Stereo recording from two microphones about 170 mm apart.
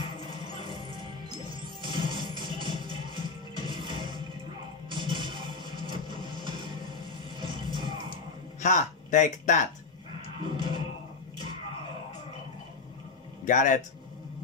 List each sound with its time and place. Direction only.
0.0 s music: 30° right (ahead or behind)
8.5 s speech: 45° left (ahead or behind)
10.4 s music: 30° right (ahead or behind)
13.5 s a man's voice: 45° left (ahead or behind)